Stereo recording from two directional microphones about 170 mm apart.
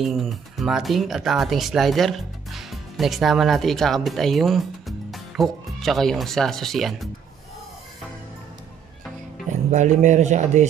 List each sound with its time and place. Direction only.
0.0 s speech: centre (ahead or behind)
9.5 s speech: 45° right (ahead or behind)